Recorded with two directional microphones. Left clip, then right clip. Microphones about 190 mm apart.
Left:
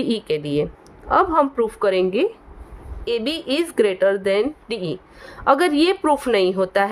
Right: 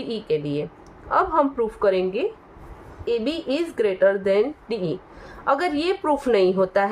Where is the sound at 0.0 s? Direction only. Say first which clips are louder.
Left 2 dB; 60° left (ahead or behind).